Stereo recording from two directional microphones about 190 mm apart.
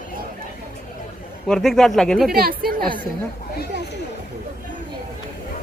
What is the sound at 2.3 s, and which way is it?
Speech, 50° right (ahead or behind).